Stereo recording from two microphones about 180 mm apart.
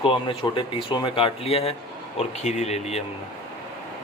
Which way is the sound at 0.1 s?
30° left (ahead or behind).